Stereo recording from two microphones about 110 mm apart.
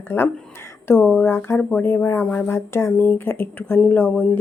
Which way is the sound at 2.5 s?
25° left (ahead or behind).